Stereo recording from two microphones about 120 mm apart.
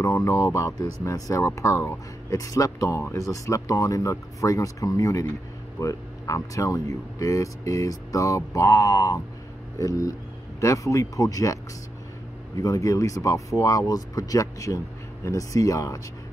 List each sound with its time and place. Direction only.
0.0 s speech: 25° left (ahead or behind)